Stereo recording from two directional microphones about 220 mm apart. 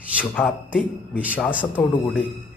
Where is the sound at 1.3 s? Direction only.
5° left (ahead or behind).